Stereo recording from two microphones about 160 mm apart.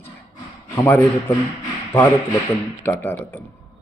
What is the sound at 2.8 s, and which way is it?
Speech, 10° left (ahead or behind).